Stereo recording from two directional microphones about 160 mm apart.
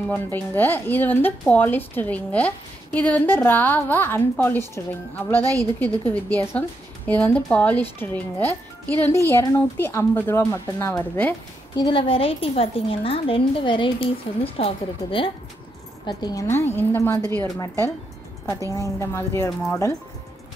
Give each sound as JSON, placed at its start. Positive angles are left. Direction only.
{"t": 0.1, "sound": "speech", "side_deg": 10}
{"t": 11.8, "sound": "a woman's voice", "side_deg": 35}